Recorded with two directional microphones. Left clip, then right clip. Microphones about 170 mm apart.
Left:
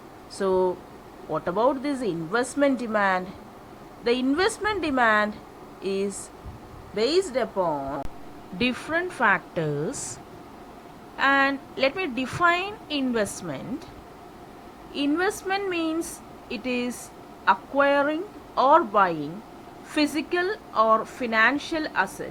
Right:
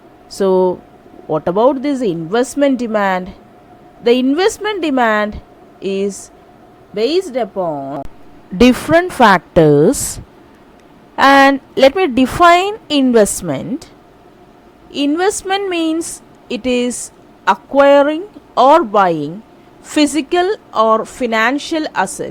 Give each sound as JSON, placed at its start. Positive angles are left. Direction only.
{"t": 0.3, "sound": "a woman's voice", "side_deg": -60}
{"t": 8.5, "sound": "a woman's voice", "side_deg": -65}
{"t": 11.2, "sound": "a woman's voice", "side_deg": -60}
{"t": 14.9, "sound": "a woman's voice", "side_deg": -60}